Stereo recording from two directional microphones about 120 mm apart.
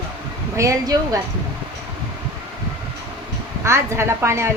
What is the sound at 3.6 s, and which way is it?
Speech, 20° right (ahead or behind).